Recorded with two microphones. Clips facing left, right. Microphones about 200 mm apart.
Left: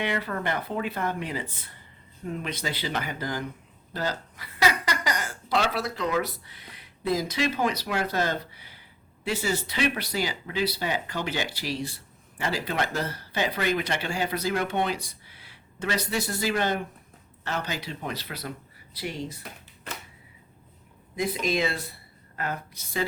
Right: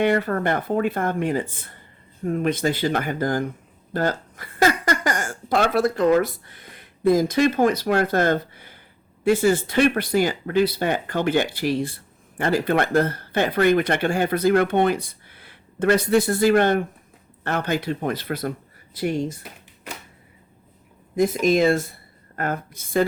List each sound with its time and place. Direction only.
0.0 s speech: 50° right (ahead or behind)
21.2 s speech: 50° right (ahead or behind)